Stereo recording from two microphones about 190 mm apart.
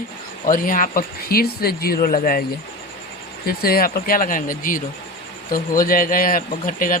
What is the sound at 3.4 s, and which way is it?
Speech, 50° left (ahead or behind).